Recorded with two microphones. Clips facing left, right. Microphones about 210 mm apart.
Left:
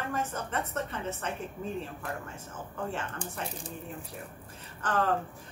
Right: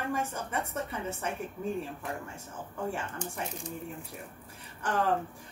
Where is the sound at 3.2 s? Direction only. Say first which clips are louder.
Right 1 dB; 35° left (ahead or behind).